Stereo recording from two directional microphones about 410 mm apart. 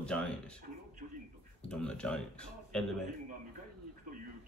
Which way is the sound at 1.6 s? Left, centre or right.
Centre.